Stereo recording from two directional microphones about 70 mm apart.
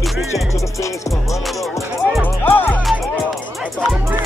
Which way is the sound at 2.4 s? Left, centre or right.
Left.